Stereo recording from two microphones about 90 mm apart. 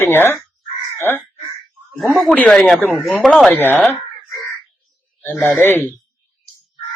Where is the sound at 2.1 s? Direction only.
10° left (ahead or behind).